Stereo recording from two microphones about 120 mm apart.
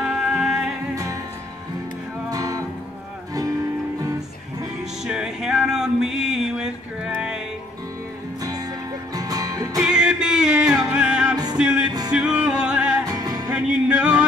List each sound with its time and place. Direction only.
0.0 s music: 5° right (ahead or behind)
2.3 s music: 30° right (ahead or behind)
5.0 s music: 5° right (ahead or behind)
9.1 s music: 30° right (ahead or behind)
9.8 s music: 5° right (ahead or behind)
13.1 s music: 30° right (ahead or behind)
13.5 s music: 10° right (ahead or behind)